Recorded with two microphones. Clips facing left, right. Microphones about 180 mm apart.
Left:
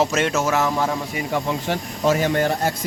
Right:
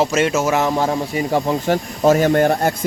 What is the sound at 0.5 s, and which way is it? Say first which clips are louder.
Speech: right 3 dB; 20° right (ahead or behind).